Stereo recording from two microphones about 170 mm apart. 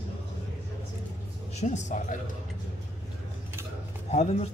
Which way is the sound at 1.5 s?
45° left (ahead or behind).